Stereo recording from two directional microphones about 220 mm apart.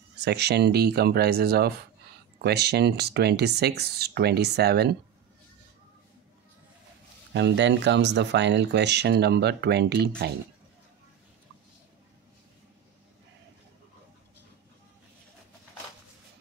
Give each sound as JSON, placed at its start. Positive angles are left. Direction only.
{"t": 0.2, "sound": "speech", "side_deg": -50}
{"t": 7.3, "sound": "speech", "side_deg": -55}